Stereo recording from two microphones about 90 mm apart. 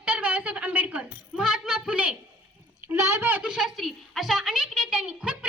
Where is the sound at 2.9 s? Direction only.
35° right (ahead or behind).